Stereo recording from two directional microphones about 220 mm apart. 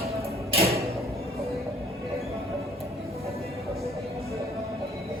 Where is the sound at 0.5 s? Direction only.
25° right (ahead or behind).